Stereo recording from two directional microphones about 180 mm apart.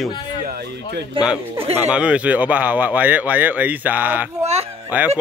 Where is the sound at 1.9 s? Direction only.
5° right (ahead or behind).